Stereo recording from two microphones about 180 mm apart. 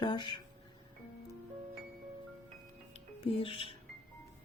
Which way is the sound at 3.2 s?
30° left (ahead or behind).